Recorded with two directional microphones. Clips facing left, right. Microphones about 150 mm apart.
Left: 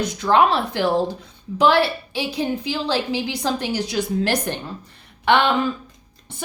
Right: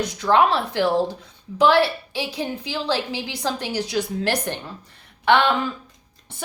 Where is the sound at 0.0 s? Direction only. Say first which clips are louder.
Left 1 dB; 20° left (ahead or behind).